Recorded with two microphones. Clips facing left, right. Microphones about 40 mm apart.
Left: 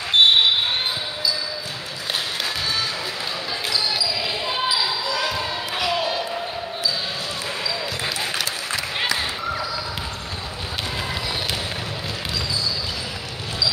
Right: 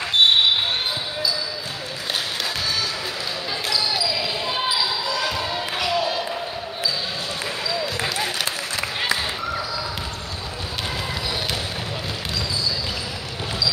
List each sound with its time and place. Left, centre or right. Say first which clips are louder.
0.2 s basketball bounce: left 1 dB; left
5.0 s basketball bounce: even; centre
5.9 s a sound: right 1 dB; centre